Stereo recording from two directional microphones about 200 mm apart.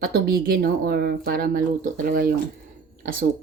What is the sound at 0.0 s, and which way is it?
Speech, 50° right (ahead or behind).